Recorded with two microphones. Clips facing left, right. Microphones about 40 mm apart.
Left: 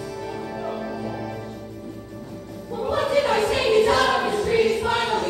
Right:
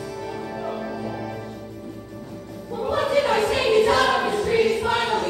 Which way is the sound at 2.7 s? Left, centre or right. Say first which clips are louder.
Even; right.